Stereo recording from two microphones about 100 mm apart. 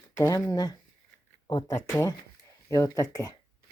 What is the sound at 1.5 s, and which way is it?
Speech, 45° left (ahead or behind).